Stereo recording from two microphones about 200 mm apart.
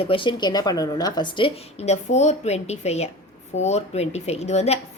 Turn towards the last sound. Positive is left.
turn(degrees=35)  # may be behind; listen again after turning